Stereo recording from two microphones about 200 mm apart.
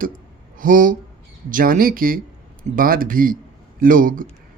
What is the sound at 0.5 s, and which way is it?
Speech, 45° right (ahead or behind).